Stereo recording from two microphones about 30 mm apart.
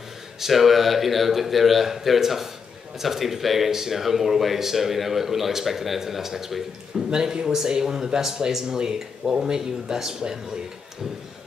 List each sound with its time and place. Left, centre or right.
0.4 s a man's voice: centre